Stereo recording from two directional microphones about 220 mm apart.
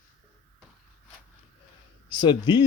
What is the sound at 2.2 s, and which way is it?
Speech, 20° left (ahead or behind).